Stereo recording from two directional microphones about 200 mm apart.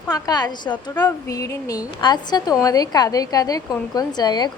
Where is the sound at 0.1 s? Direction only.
20° left (ahead or behind).